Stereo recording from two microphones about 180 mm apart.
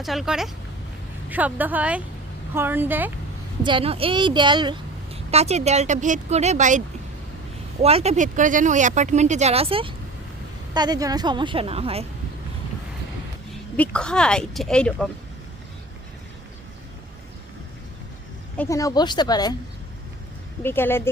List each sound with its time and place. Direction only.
0.0 s speech: centre (ahead or behind)
3.6 s a woman's voice: 30° right (ahead or behind)
13.7 s speech: 5° left (ahead or behind)
18.5 s a woman's voice: 15° left (ahead or behind)
20.7 s speech: 10° left (ahead or behind)